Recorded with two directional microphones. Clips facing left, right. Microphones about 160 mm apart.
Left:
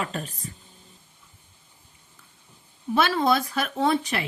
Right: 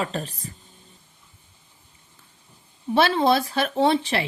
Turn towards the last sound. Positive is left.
turn(degrees=-30)  # may be behind; listen again after turning